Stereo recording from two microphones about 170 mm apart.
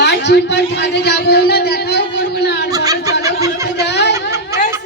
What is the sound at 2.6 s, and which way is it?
Snicker, 20° right (ahead or behind).